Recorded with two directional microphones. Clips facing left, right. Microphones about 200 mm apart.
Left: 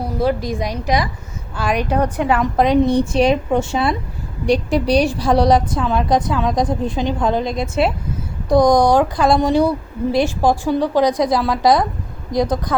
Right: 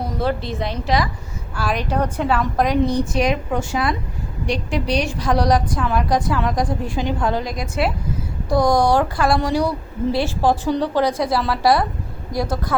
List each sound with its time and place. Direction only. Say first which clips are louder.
0.2 s a woman's voice: left 5 dB; 10° left (ahead or behind)
4.4 s a woman's voice: left 6 dB; 35° left (ahead or behind); by 12.7 s 20° left (ahead or behind)